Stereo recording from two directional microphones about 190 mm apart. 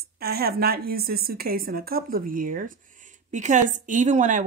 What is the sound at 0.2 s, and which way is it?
A woman's voice, 55° right (ahead or behind).